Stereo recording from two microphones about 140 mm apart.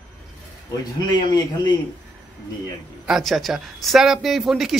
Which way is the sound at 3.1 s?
Centre (ahead or behind).